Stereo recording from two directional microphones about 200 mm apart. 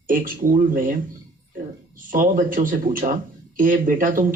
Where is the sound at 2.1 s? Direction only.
45° right (ahead or behind).